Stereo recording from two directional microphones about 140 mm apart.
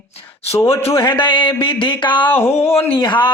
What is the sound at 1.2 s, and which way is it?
Speech, 35° left (ahead or behind).